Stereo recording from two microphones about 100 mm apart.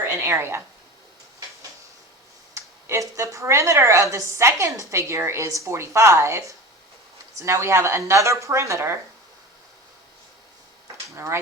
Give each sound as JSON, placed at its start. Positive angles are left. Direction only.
{"t": 0.0, "sound": "speech", "side_deg": -25}
{"t": 2.6, "sound": "a woman's voice", "side_deg": -30}
{"t": 11.1, "sound": "speech", "side_deg": -30}